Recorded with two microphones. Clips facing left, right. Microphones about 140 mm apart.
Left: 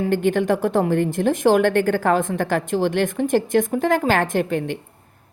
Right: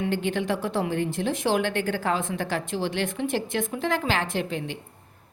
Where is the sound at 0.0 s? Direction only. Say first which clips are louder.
Left 7 dB; 50° left (ahead or behind).